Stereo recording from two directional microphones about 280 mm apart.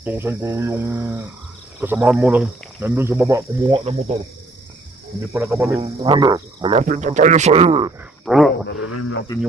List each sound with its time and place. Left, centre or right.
0.0 s speech: centre
5.3 s cricket: centre
8.2 s speech: centre
8.6 s speech: left